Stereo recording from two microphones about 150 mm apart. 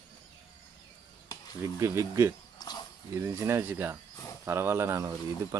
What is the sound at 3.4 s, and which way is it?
Speech, 15° right (ahead or behind).